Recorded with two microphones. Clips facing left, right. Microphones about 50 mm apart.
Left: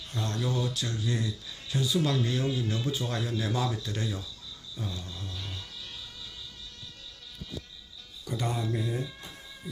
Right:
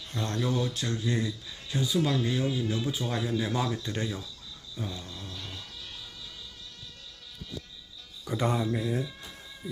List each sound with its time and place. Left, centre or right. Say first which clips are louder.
0.2 s speech: right 2 dB; right
0.7 s speech: right 2 dB; right
1.5 s speech: even; centre
2.0 s speech: right 2 dB; centre; by 4.2 s right
4.8 s speech: right 1 dB; centre
8.3 s speech: right 4 dB; centre
8.6 s speech: right 2 dB; centre